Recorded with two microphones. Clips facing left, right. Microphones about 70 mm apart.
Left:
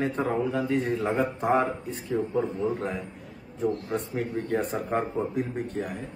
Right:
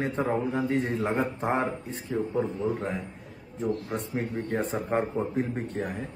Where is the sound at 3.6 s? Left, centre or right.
Right.